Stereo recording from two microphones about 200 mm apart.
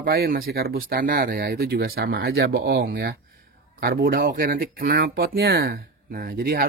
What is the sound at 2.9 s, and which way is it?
Speech, 65° right (ahead or behind).